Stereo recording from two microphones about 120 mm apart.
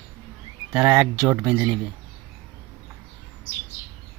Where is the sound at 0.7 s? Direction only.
10° right (ahead or behind).